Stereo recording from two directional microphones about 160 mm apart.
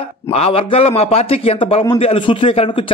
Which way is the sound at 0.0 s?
35° left (ahead or behind).